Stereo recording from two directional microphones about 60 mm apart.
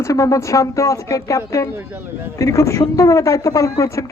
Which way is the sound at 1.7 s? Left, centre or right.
Right.